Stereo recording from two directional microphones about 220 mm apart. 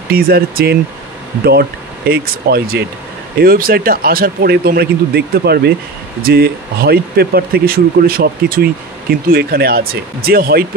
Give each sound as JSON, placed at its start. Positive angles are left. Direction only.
{"t": 0.1, "sound": "a man's voice", "side_deg": -45}